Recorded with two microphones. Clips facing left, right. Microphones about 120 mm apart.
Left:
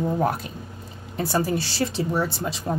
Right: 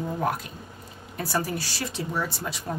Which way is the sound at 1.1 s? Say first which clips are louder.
Left 5 dB; 25° left (ahead or behind).